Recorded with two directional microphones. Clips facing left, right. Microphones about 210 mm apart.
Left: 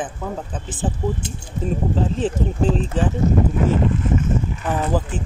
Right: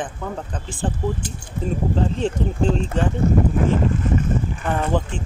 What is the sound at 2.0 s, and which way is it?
Speech, 5° left (ahead or behind).